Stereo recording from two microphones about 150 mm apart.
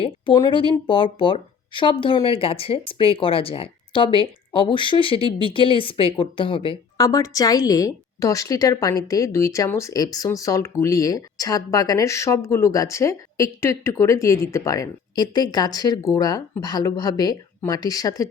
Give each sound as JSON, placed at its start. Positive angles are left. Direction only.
{"t": 0.3, "sound": "a woman's voice", "side_deg": 30}
{"t": 6.9, "sound": "a woman's voice", "side_deg": 25}